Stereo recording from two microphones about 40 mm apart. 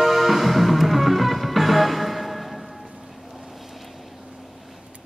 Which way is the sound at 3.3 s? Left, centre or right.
Centre.